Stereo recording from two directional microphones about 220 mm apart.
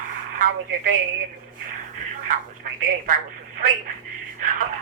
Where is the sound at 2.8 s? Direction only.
40° right (ahead or behind).